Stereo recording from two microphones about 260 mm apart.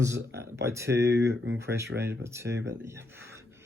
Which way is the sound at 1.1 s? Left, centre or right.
Right.